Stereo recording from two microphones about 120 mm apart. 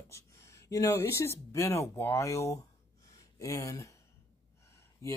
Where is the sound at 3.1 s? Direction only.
25° left (ahead or behind).